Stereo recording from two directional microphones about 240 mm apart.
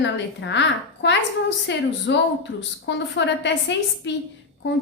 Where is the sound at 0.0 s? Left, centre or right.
Left.